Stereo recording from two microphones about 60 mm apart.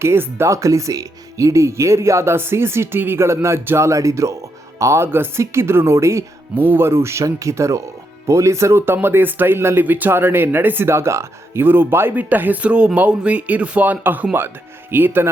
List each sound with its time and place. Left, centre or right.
0.0 s speech: right
3.8 s speech: right
5.0 s speech: right
6.6 s speech: right
7.3 s speech: right
8.8 s speech: right
11.6 s speech: right
12.1 s speech: right